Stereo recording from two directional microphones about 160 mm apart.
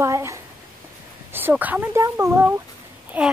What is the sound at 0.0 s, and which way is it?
Speech, 20° right (ahead or behind).